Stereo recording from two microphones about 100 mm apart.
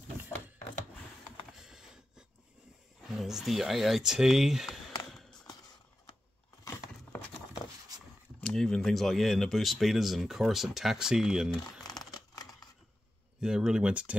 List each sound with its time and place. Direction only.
1.6 s a sound: 5° right (ahead or behind)
3.0 s speech: 5° right (ahead or behind)
5.0 s a sound: centre (ahead or behind)
8.4 s speech: 5° left (ahead or behind)
11.6 s crumpling: 40° left (ahead or behind)
13.4 s speech: 5° right (ahead or behind)